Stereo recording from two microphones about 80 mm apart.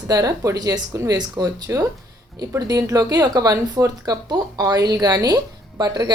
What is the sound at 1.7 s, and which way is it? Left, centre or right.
Speech, right.